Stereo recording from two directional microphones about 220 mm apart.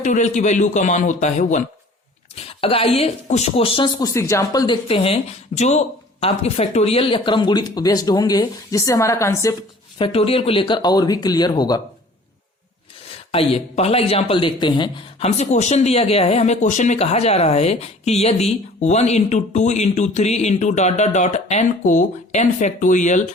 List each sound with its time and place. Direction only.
0.0 s speech: 35° left (ahead or behind); by 9.6 s 15° left (ahead or behind)
10.0 s speech: 25° left (ahead or behind)
13.3 s speech: 25° left (ahead or behind)